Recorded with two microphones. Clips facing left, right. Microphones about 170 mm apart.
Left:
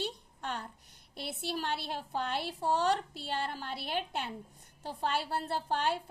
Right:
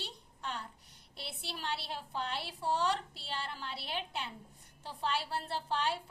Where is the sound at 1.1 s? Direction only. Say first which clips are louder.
Left 8 dB; 50° left (ahead or behind).